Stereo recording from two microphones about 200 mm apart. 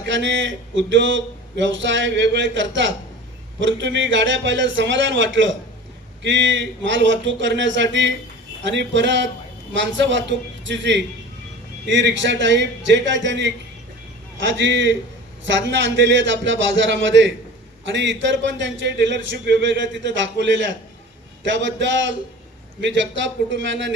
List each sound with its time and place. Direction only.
0.1 s a sound: 65° right (ahead or behind)
1.6 s a man's voice: 65° right (ahead or behind)
23.0 s a man's voice: 65° right (ahead or behind)